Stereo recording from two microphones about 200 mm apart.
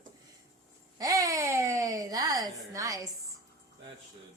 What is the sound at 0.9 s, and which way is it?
Speech, 20° right (ahead or behind).